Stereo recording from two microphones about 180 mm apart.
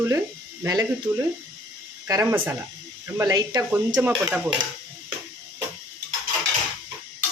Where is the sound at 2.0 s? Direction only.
15° right (ahead or behind).